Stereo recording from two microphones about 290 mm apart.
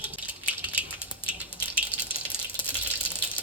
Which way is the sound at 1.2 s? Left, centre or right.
Centre.